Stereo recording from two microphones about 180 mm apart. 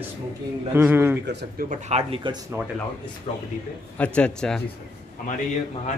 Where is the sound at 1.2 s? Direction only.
70° right (ahead or behind).